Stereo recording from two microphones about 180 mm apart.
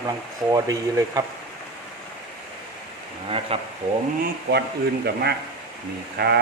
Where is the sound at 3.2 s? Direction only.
30° right (ahead or behind).